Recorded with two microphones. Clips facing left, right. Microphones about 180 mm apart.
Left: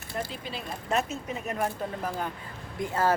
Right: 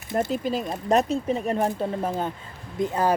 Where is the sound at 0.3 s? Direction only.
45° right (ahead or behind).